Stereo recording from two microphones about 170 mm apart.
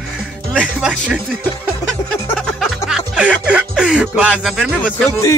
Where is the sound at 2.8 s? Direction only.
5° right (ahead or behind).